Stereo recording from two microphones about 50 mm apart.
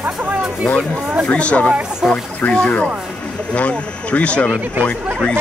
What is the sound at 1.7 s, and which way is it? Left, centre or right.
Speech, centre.